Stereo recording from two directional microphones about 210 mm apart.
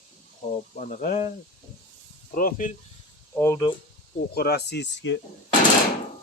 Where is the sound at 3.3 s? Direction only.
10° left (ahead or behind).